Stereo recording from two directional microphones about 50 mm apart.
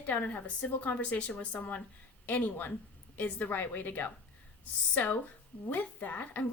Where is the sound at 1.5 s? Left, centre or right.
Left.